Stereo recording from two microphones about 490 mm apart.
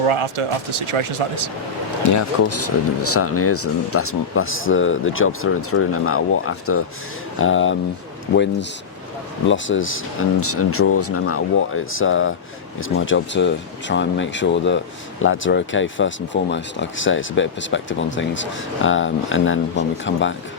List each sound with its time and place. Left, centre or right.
0.0 s speech: right
2.0 s speech: left
9.5 s speech: left